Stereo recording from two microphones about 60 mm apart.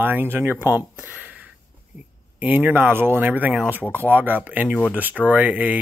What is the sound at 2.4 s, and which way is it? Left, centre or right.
Speech, right.